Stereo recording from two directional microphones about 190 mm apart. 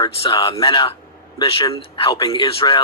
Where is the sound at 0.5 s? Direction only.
30° left (ahead or behind).